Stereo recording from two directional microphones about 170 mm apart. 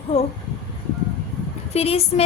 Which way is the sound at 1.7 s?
35° left (ahead or behind).